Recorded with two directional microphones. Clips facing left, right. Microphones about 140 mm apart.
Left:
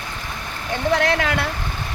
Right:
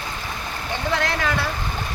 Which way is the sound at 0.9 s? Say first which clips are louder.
Left 4 dB; 65° left (ahead or behind).